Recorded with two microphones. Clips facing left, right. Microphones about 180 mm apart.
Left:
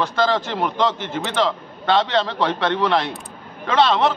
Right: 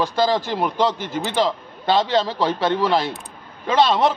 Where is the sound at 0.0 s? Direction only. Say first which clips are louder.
Right 1 dB; 10° right (ahead or behind).